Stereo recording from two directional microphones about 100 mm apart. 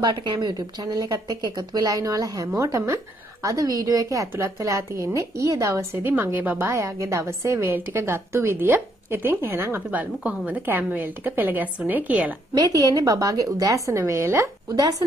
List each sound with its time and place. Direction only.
0.2 s a woman's voice: 50° right (ahead or behind); by 12.3 s 15° right (ahead or behind)
12.5 s speech: 40° right (ahead or behind)